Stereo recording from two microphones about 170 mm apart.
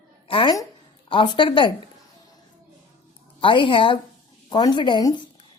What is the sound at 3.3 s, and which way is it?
Speech, 30° left (ahead or behind).